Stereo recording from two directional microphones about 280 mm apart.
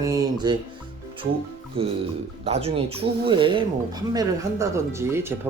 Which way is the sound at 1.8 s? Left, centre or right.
Centre.